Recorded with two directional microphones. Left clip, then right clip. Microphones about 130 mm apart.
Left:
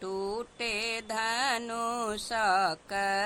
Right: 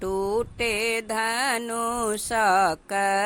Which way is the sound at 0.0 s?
35° right (ahead or behind).